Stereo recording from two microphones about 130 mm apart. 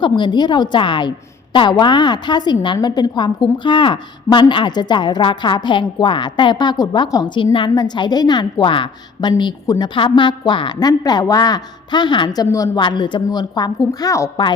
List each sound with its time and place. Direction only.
0.0 s a woman's voice: 35° left (ahead or behind)
12.8 s a woman's voice: 35° left (ahead or behind)